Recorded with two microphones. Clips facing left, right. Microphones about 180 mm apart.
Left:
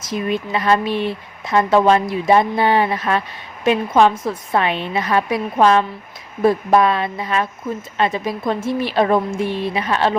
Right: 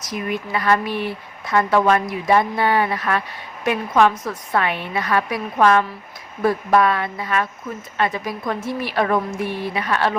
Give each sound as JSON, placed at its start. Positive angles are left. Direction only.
{"t": 0.0, "sound": "speech", "side_deg": 25}